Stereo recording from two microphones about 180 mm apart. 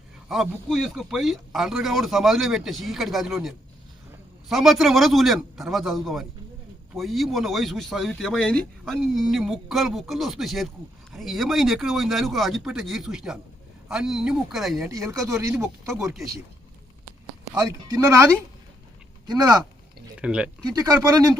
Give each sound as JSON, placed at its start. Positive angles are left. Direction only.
{"t": 0.3, "sound": "speech", "side_deg": 0}
{"t": 14.8, "sound": "speech", "side_deg": -20}
{"t": 16.0, "sound": "speech", "side_deg": 0}
{"t": 17.6, "sound": "speech", "side_deg": -20}
{"t": 19.3, "sound": "speech", "side_deg": -20}
{"t": 20.1, "sound": "speech", "side_deg": -5}
{"t": 20.6, "sound": "speech", "side_deg": -20}